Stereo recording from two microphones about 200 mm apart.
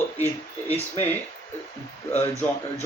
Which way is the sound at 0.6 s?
10° left (ahead or behind).